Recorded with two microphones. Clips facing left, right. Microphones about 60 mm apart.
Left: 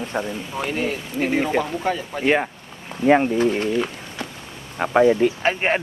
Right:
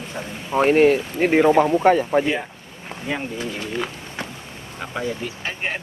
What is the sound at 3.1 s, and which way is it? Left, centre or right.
Speech, left.